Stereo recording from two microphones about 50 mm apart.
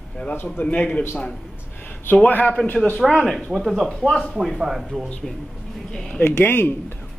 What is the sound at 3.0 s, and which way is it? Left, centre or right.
Speech, centre.